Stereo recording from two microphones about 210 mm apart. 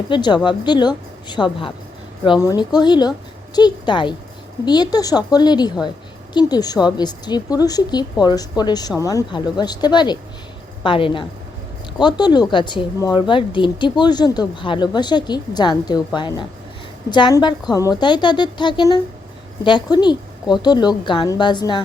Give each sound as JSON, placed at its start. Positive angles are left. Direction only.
{"t": 0.1, "sound": "speech", "side_deg": 20}